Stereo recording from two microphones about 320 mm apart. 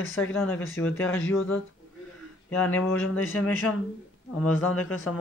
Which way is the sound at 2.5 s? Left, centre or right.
Centre.